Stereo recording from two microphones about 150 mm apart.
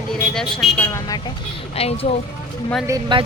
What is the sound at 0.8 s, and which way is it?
Speech, 20° left (ahead or behind).